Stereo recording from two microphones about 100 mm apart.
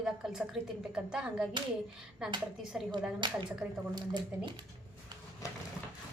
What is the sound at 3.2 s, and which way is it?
Speech, 50° right (ahead or behind).